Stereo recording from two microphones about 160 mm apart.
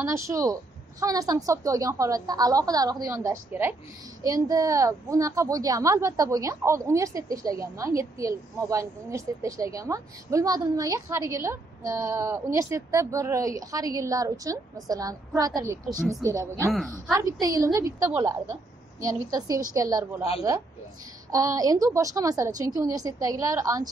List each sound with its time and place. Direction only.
0.1 s a woman's voice: 20° right (ahead or behind)
21.3 s a woman's voice: 20° right (ahead or behind)